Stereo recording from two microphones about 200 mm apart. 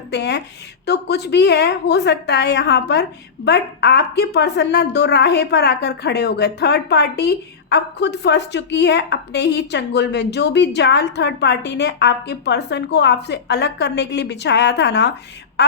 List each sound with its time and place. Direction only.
0.1 s a woman's voice: 55° left (ahead or behind)